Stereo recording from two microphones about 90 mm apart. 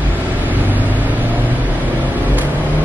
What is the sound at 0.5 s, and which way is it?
Vehicle, 20° right (ahead or behind).